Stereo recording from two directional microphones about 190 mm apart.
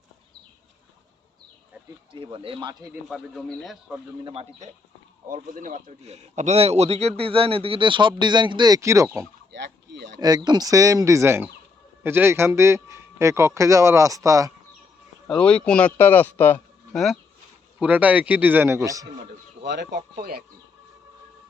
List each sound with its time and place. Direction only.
2.1 s speech: 25° right (ahead or behind)
2.9 s a man's voice: centre (ahead or behind)
4.2 s speech: 30° right (ahead or behind)
5.3 s speech: 45° right (ahead or behind); by 9.2 s 15° right (ahead or behind)
9.5 s a sound: 65° right (ahead or behind)
10.2 s speech: 20° right (ahead or behind)
15.3 s a man's voice: 5° left (ahead or behind); by 19.0 s 15° right (ahead or behind)
19.6 s speech: 65° right (ahead or behind)
20.0 s speech: 50° right (ahead or behind)